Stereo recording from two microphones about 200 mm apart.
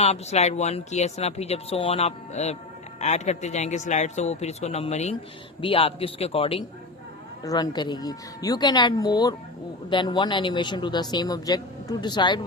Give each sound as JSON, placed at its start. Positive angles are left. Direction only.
{"t": 0.0, "sound": "a man's voice", "side_deg": 35}